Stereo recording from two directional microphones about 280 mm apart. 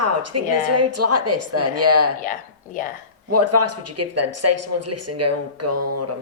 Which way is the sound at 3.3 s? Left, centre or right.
Right.